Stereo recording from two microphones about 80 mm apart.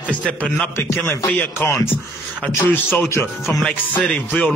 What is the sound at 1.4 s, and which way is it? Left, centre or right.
A man's voice, left.